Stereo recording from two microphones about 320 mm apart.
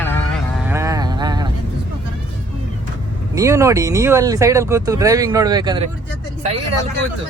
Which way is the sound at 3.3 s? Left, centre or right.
Centre.